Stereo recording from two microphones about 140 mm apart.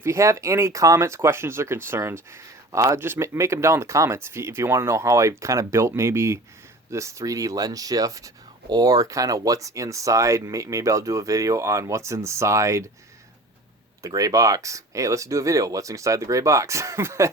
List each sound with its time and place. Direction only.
0.0 s speech: 20° right (ahead or behind)
14.0 s speech: 25° right (ahead or behind)